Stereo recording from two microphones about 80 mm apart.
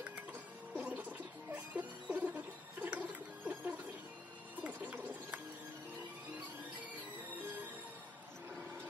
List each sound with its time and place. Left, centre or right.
0.3 s music: centre